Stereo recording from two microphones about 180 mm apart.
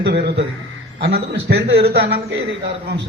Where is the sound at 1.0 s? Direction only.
65° right (ahead or behind).